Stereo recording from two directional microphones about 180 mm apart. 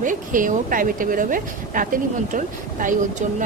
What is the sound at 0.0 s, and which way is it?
Speech, 45° right (ahead or behind).